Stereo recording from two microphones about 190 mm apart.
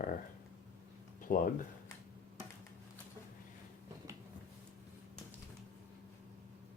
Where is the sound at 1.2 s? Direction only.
45° left (ahead or behind).